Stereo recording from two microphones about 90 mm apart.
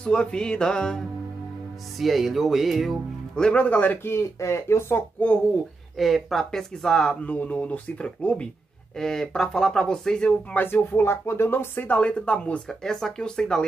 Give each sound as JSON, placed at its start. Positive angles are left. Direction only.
{"t": 0.0, "sound": "speech", "side_deg": 10}
{"t": 5.9, "sound": "speech", "side_deg": 0}
{"t": 10.6, "sound": "speech", "side_deg": 25}